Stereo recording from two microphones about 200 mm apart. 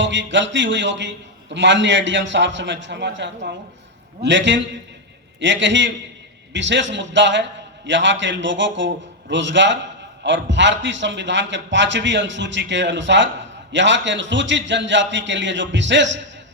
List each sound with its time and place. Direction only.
0.0 s a man's voice: 65° right (ahead or behind)